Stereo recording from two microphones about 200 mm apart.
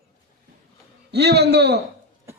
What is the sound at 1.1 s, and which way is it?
Speech, 55° right (ahead or behind).